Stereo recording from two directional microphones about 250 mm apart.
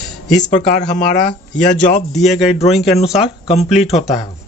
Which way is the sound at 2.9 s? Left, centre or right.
Left.